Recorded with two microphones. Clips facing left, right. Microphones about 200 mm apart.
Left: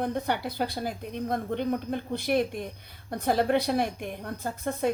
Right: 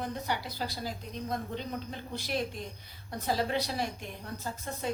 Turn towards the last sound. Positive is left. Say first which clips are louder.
# left 8 dB
turn(degrees=55)  # may be behind; listen again after turning